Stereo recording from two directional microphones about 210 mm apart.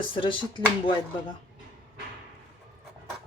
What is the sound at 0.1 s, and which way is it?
Speech, 25° left (ahead or behind).